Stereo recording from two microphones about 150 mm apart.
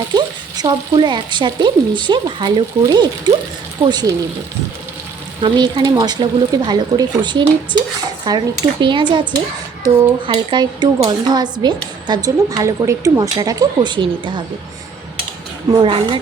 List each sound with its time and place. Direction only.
0.1 s speech: 30° right (ahead or behind)
5.4 s speech: 30° right (ahead or behind)
15.7 s speech: 35° right (ahead or behind)